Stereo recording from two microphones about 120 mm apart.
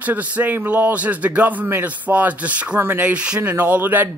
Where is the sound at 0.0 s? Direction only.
15° right (ahead or behind).